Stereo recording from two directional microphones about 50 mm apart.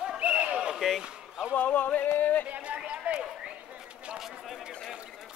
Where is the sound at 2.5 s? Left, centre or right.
Right.